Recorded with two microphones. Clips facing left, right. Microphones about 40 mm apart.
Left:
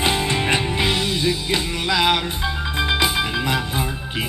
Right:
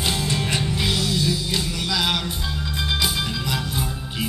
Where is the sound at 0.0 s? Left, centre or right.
Left.